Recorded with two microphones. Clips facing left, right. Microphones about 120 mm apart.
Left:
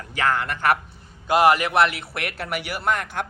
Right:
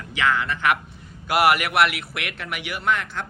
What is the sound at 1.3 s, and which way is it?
Speech, 25° left (ahead or behind).